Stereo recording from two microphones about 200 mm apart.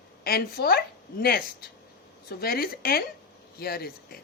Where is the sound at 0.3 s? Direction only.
50° left (ahead or behind).